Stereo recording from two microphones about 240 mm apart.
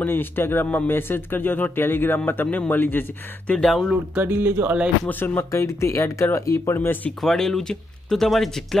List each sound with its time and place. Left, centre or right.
0.0 s speech: centre
5.0 s speech: centre